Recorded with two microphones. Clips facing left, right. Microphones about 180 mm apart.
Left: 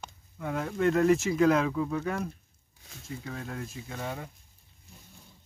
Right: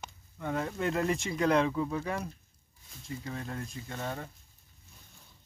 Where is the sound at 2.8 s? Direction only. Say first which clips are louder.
Left 3 dB; 80° left.